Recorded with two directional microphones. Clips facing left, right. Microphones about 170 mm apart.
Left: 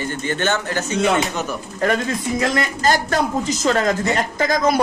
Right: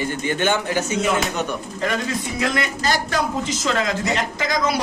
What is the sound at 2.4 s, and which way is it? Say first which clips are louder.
A man's voice: left 3 dB; 45° left (ahead or behind).